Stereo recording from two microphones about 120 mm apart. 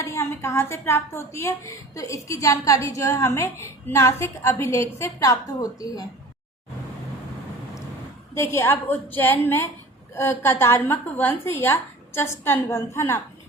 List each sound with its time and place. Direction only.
0.0 s a woman's voice: 25° left (ahead or behind)
8.4 s a woman's voice: 20° left (ahead or behind)